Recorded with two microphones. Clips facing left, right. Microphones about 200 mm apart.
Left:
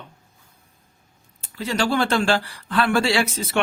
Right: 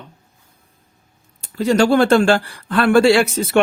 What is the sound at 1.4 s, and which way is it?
Speech, 45° right (ahead or behind).